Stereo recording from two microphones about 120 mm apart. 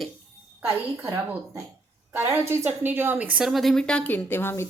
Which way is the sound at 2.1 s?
15° right (ahead or behind).